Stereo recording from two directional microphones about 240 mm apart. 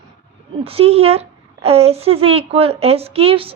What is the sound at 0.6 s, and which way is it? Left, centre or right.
A woman's voice, right.